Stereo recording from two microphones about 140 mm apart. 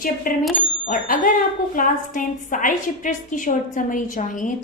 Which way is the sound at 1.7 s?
70° left (ahead or behind).